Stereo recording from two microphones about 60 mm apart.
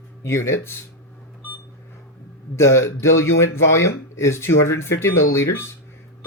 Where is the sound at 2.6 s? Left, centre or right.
Left.